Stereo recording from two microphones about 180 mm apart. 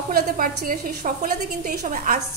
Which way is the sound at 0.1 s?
50° right (ahead or behind).